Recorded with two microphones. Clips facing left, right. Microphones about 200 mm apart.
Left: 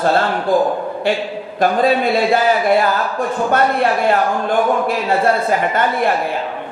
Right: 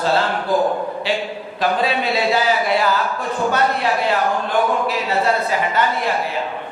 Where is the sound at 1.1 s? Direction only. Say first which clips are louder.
Left 4 dB; 50° left (ahead or behind).